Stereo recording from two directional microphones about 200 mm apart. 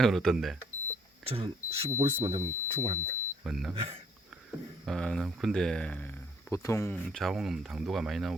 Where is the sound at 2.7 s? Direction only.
35° right (ahead or behind).